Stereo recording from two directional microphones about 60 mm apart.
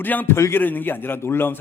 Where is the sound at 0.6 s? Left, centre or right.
Left.